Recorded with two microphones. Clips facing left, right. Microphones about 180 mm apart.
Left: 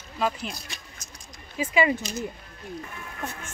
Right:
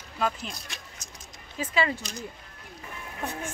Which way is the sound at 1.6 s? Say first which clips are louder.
Left 4 dB; 10° left (ahead or behind).